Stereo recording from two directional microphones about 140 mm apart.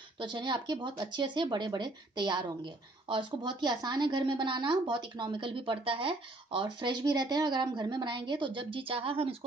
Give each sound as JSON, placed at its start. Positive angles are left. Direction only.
{"t": 0.2, "sound": "speech", "side_deg": -35}